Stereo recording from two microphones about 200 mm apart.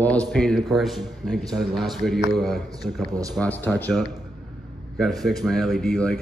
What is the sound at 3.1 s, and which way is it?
Speech, 15° right (ahead or behind).